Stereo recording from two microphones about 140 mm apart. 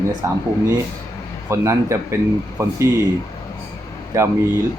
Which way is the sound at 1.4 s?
20° right (ahead or behind).